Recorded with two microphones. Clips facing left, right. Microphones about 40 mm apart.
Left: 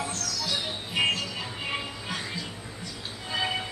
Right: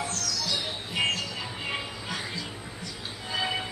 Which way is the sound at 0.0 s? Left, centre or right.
Centre.